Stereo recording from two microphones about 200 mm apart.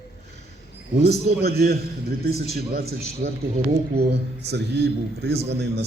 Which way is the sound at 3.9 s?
55° right (ahead or behind).